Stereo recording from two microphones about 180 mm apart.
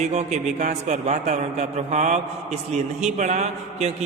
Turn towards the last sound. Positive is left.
turn(degrees=-40)  # may be behind; listen again after turning